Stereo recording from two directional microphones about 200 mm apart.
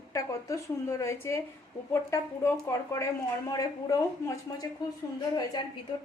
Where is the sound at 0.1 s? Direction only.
15° left (ahead or behind).